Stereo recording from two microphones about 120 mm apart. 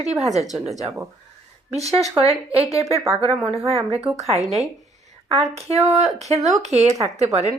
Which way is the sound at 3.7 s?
55° right (ahead or behind).